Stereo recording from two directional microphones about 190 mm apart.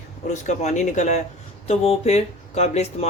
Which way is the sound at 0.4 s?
40° left (ahead or behind).